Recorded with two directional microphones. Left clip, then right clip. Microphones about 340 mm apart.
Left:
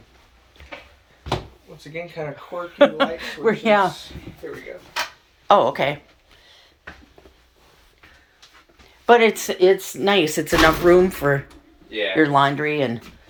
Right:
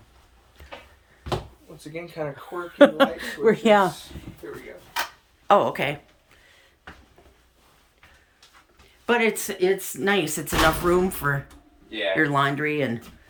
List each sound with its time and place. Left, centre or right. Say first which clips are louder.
1.9 s speech: left 2 dB; centre
5.5 s speech: left 3 dB; centre
9.0 s speech: left 7 dB; centre